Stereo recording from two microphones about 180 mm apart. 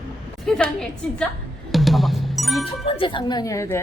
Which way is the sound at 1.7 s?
Centre (ahead or behind).